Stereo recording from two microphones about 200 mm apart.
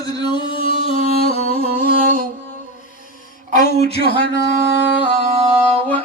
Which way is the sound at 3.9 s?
55° left (ahead or behind).